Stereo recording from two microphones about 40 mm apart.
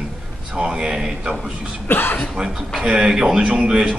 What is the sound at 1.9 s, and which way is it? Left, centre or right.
Speech, left.